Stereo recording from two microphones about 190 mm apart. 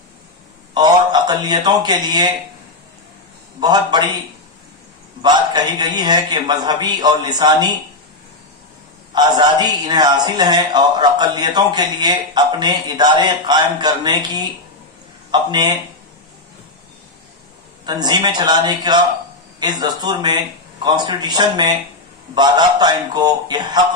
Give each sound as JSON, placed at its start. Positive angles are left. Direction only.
{"t": 0.7, "sound": "a man's voice", "side_deg": -20}
{"t": 3.6, "sound": "a man's voice", "side_deg": -20}
{"t": 5.2, "sound": "a man's voice", "side_deg": -20}
{"t": 9.1, "sound": "a man's voice", "side_deg": -20}
{"t": 17.8, "sound": "a man's voice", "side_deg": -20}